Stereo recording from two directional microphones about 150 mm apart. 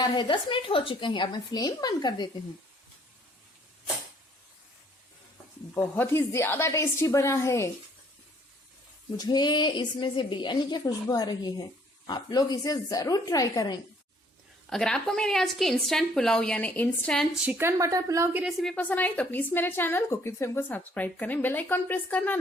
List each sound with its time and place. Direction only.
0.0 s a woman's voice: 30° left (ahead or behind)
5.7 s a woman's voice: 15° left (ahead or behind)
9.1 s a woman's voice: 30° left (ahead or behind)
14.7 s a woman's voice: 5° left (ahead or behind)
17.4 s speech: 15° right (ahead or behind)
18.3 s a woman's voice: centre (ahead or behind)